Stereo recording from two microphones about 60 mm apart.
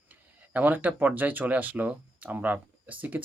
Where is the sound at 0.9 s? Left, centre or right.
Right.